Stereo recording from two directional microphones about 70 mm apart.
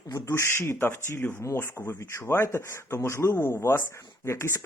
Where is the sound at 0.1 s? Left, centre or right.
Left.